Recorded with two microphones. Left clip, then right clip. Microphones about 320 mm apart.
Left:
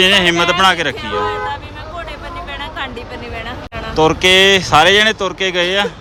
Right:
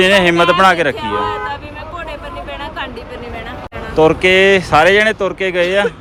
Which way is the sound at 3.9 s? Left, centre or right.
Centre.